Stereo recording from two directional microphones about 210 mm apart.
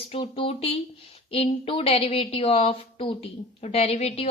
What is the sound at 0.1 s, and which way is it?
A woman's voice, 30° left (ahead or behind).